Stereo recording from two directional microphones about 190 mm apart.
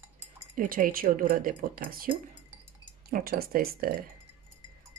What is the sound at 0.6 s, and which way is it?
Speech, 45° right (ahead or behind).